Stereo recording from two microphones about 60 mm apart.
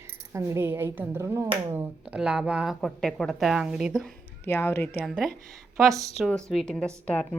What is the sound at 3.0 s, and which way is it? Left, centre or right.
Speech, centre.